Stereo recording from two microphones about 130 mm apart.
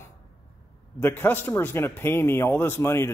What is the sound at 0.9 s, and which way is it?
A man's voice, 15° left (ahead or behind).